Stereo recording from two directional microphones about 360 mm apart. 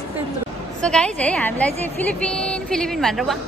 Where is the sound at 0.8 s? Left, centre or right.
Centre.